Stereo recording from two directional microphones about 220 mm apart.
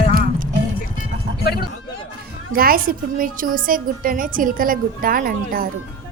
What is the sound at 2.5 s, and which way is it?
A woman's voice, 40° right (ahead or behind).